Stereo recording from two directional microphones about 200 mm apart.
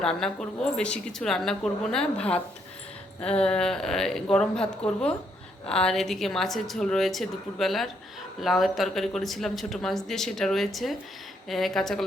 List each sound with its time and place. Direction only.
0.0 s speech: 5° left (ahead or behind)